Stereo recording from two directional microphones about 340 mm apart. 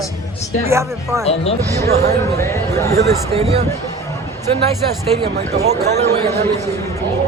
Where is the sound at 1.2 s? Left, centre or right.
Centre.